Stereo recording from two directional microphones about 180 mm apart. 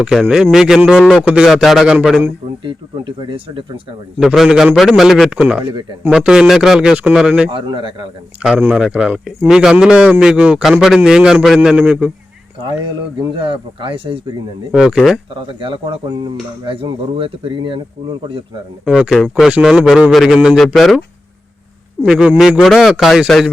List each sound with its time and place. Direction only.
0.0 s speech: centre (ahead or behind)
2.6 s speech: 30° right (ahead or behind)
4.2 s speech: centre (ahead or behind)
7.5 s speech: 25° right (ahead or behind)
8.4 s speech: 5° right (ahead or behind)
13.3 s speech: 30° right (ahead or behind)
14.7 s speech: 5° right (ahead or behind)
15.4 s speech: 30° right (ahead or behind)
18.9 s speech: 5° right (ahead or behind)
22.0 s speech: 5° right (ahead or behind)